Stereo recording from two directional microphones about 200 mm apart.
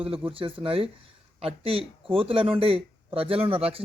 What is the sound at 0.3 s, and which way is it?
Speech, 25° right (ahead or behind).